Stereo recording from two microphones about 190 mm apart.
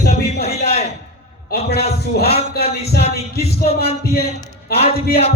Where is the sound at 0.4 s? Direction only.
35° left (ahead or behind).